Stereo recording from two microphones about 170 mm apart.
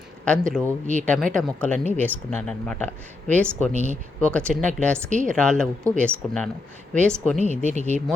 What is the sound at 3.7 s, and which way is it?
Speech, 40° right (ahead or behind).